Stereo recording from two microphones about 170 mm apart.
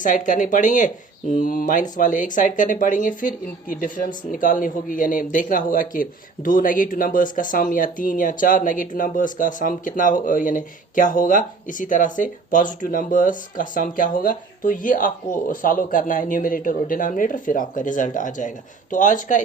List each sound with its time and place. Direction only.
0.0 s speech: 50° left (ahead or behind)